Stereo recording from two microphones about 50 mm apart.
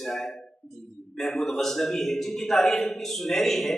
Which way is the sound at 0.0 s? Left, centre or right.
Centre.